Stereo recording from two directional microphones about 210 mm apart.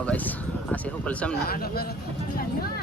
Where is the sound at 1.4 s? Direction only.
45° left (ahead or behind).